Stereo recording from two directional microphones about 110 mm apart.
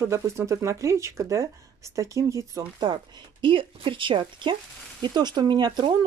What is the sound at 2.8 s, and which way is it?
Speech, 45° right (ahead or behind).